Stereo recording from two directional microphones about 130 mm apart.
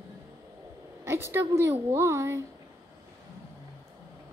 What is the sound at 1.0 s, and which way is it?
A child's voice, 20° right (ahead or behind).